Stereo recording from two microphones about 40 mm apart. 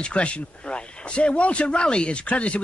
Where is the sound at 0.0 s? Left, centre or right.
Left.